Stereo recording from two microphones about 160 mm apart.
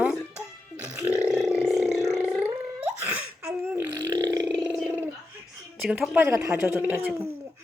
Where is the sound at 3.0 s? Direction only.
10° right (ahead or behind).